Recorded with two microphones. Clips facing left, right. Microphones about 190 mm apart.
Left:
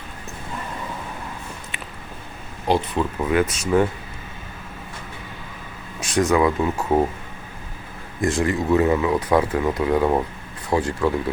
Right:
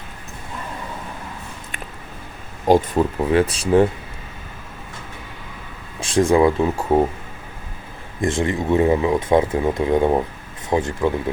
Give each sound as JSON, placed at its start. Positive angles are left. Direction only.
{"t": 2.6, "sound": "speech", "side_deg": -45}
{"t": 3.0, "sound": "speech", "side_deg": -30}
{"t": 6.0, "sound": "speech", "side_deg": -30}
{"t": 8.2, "sound": "speech", "side_deg": -25}